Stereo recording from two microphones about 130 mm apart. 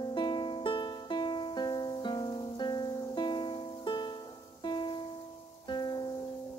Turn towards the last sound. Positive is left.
turn(degrees=35)  # may be behind; listen again after turning